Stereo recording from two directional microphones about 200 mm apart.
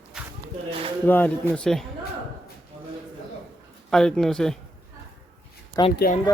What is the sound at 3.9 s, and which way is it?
Speech, 5° left (ahead or behind).